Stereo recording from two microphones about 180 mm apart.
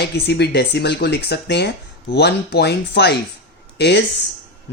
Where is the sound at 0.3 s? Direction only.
65° left (ahead or behind).